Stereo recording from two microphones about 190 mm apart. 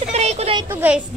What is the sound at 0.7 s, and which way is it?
Speech, 10° right (ahead or behind).